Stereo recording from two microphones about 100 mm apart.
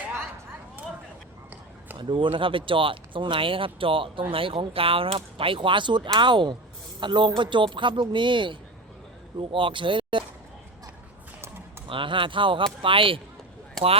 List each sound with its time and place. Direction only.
2.0 s speech: 55° right (ahead or behind)
11.9 s speech: 60° right (ahead or behind)